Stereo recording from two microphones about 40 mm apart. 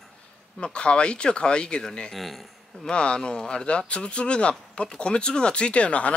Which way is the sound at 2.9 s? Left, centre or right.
Left.